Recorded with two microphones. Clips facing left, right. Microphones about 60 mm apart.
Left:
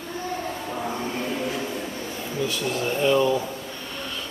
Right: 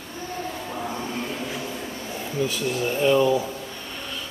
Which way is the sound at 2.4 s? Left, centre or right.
Centre.